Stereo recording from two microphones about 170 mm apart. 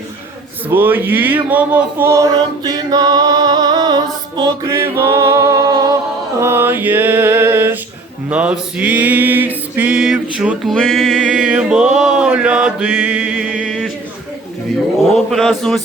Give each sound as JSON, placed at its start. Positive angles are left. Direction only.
{"t": 0.7, "sound": "music", "side_deg": -10}
{"t": 15.1, "sound": "speech", "side_deg": 0}